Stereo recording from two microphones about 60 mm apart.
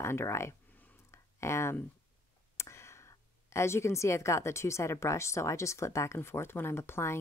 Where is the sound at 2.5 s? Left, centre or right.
Left.